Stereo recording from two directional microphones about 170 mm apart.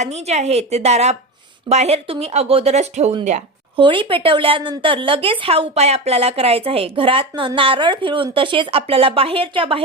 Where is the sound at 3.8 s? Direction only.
30° right (ahead or behind).